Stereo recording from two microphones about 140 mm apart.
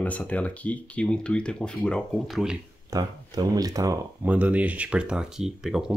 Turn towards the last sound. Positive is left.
turn(degrees=-5)  # may be behind; listen again after turning